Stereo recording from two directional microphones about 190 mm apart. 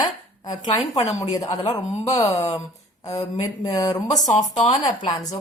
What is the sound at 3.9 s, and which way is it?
Speech, 20° left (ahead or behind).